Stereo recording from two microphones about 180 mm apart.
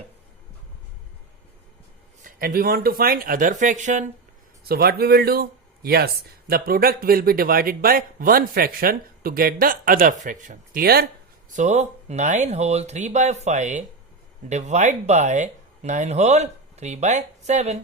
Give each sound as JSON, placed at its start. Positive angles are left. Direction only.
{"t": 2.2, "sound": "speech", "side_deg": -55}
{"t": 4.7, "sound": "speech", "side_deg": -60}
{"t": 11.5, "sound": "speech", "side_deg": -40}